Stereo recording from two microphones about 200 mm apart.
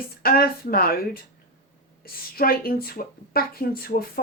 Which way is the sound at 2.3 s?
45° left (ahead or behind).